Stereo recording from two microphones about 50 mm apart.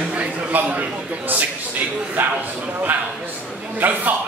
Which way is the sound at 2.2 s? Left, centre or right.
Right.